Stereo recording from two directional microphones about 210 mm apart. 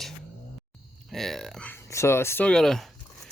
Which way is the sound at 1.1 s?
Centre (ahead or behind).